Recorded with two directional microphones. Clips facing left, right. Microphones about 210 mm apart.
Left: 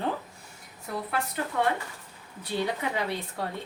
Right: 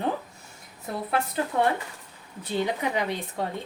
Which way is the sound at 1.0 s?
25° right (ahead or behind).